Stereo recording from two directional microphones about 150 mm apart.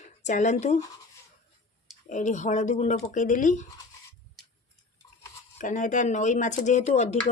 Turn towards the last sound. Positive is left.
turn(degrees=50)  # may be behind; listen again after turning